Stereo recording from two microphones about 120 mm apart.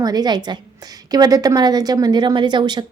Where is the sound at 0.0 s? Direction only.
35° right (ahead or behind).